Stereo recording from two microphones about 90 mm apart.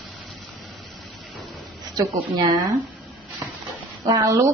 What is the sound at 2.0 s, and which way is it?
Speech, 50° right (ahead or behind).